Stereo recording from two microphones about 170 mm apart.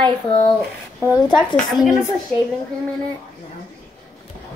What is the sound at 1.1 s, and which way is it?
Speech, 25° left (ahead or behind).